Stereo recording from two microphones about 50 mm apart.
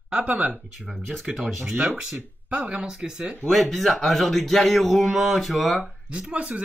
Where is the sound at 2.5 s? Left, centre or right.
Right.